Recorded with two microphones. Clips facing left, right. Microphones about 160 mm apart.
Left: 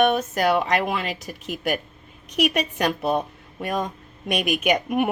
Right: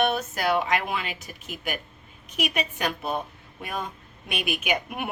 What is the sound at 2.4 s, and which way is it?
A woman's voice, 40° left (ahead or behind).